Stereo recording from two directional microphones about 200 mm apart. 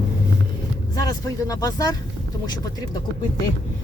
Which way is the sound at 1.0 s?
15° left (ahead or behind).